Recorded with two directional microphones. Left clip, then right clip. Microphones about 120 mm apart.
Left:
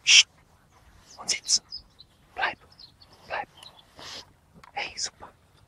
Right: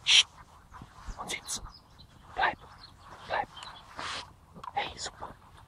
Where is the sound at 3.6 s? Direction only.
55° left (ahead or behind).